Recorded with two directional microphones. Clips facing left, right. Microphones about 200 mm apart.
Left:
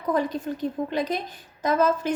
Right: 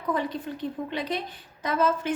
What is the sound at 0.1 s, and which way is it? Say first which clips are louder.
A woman's voice: left 4 dB; 45° left (ahead or behind).